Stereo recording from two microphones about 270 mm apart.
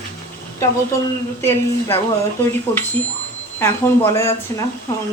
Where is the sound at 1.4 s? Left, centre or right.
Centre.